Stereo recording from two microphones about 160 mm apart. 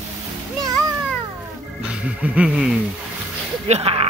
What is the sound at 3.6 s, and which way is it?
Speech, 40° right (ahead or behind).